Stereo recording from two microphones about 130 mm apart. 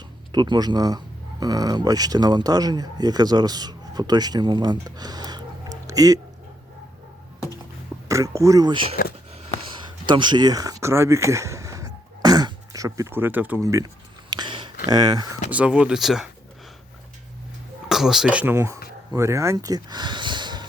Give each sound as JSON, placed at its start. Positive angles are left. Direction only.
{"t": 0.3, "sound": "speech", "side_deg": -35}
{"t": 8.0, "sound": "speech", "side_deg": -25}
{"t": 10.1, "sound": "speech", "side_deg": -35}
{"t": 14.3, "sound": "a sound", "side_deg": -35}
{"t": 14.8, "sound": "speech", "side_deg": -30}
{"t": 15.4, "sound": "speech", "side_deg": -10}
{"t": 17.8, "sound": "speech", "side_deg": -5}
{"t": 18.5, "sound": "speech", "side_deg": -20}